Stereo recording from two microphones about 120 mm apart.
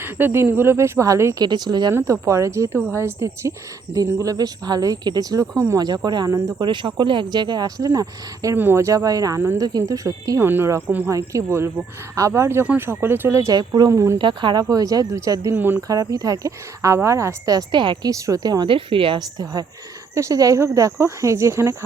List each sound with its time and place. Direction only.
0.0 s speech: 20° right (ahead or behind)
1.5 s speech: 35° right (ahead or behind)
1.9 s speech: 20° right (ahead or behind)
6.7 s speech: 40° right (ahead or behind); by 14.2 s 25° right (ahead or behind)
14.2 s speech: 40° right (ahead or behind); by 15.8 s 15° right (ahead or behind)
15.9 s speech: 30° right (ahead or behind)
18.1 s speech: 30° right (ahead or behind); by 19.2 s 45° right (ahead or behind)
20.1 s speech: 30° right (ahead or behind)